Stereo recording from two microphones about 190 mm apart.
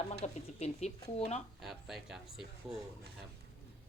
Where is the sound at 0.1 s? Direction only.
35° left (ahead or behind).